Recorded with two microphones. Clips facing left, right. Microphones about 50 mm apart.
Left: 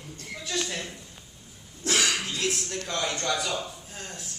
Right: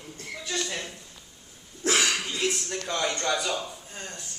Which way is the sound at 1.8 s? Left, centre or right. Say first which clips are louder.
Right 2 dB; right.